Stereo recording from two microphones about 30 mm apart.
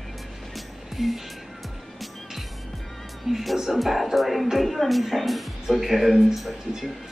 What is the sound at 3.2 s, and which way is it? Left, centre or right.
Music, centre.